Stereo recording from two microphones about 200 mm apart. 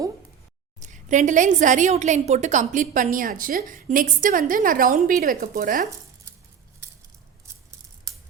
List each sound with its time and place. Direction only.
0.8 s a woman's voice: 40° right (ahead or behind)